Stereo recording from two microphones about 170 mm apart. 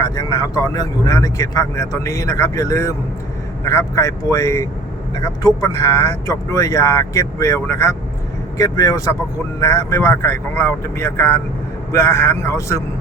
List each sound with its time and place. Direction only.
0.0 s speech: 20° left (ahead or behind)